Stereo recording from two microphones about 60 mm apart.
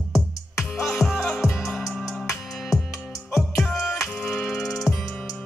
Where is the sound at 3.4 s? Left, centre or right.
Centre.